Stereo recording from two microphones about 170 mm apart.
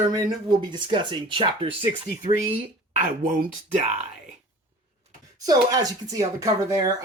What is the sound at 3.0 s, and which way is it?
Speech, 50° right (ahead or behind).